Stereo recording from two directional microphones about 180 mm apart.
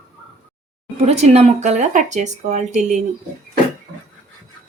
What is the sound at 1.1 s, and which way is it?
Speech, 35° right (ahead or behind).